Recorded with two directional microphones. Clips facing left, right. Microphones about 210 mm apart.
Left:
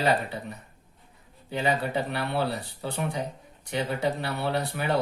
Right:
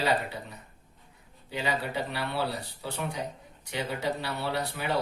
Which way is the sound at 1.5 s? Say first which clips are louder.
Left 4 dB; 55° left (ahead or behind).